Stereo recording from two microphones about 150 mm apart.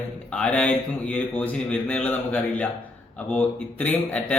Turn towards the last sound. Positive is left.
turn(degrees=10)  # may be behind; listen again after turning